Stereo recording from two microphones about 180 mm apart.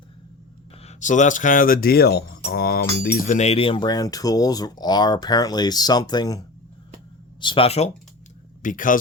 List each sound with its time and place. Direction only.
0.8 s speech: 40° left (ahead or behind); by 2.8 s 60° left (ahead or behind)
3.0 s speech: 50° left (ahead or behind); by 6.4 s 20° left (ahead or behind)
7.4 s speech: 30° left (ahead or behind)
8.6 s speech: 50° left (ahead or behind)